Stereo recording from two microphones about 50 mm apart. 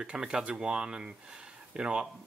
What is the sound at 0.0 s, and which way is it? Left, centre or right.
Speech, centre.